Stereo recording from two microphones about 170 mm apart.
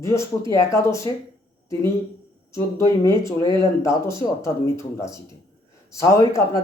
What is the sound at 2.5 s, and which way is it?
Speech, 20° left (ahead or behind).